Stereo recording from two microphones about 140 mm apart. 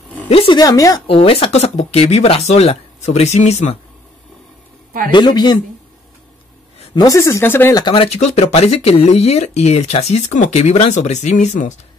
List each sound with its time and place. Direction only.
0.3 s speech: 40° left (ahead or behind)
0.6 s speech: 25° left (ahead or behind)
1.0 s speech: 40° left (ahead or behind)
5.1 s speech: 30° left (ahead or behind)
7.0 s speech: 20° left (ahead or behind)
7.7 s speech: 35° left (ahead or behind); by 11.7 s 60° left (ahead or behind)